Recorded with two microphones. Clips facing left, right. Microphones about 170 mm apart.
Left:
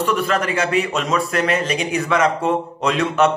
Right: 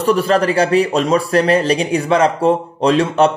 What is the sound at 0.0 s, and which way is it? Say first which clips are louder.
A man's voice: right 6 dB; 35° right (ahead or behind).